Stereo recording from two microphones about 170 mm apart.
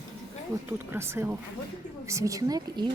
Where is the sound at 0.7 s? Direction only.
15° right (ahead or behind).